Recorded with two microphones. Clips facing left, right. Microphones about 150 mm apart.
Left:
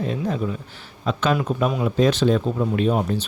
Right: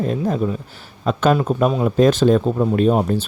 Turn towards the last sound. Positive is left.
turn(degrees=-40)  # may be behind; listen again after turning